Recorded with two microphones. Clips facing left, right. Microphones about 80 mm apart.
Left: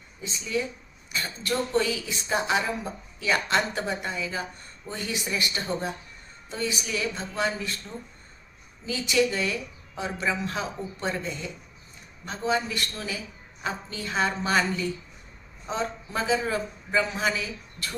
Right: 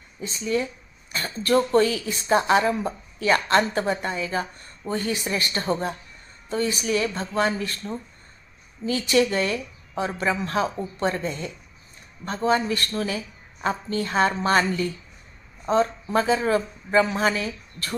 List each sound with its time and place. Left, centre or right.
0.2 s a woman's voice: right